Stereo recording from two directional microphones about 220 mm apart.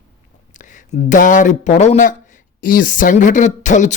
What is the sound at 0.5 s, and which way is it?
Speech, 35° left (ahead or behind).